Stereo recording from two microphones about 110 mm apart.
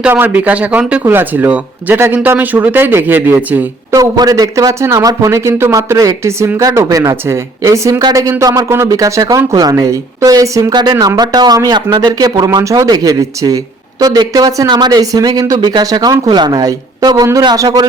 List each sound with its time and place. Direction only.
0.0 s speech: 15° right (ahead or behind)
3.9 s speech: 35° right (ahead or behind)